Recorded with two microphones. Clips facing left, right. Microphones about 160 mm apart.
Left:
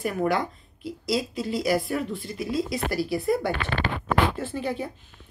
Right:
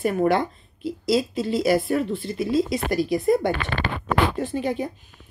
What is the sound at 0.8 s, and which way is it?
A woman's voice, 25° right (ahead or behind).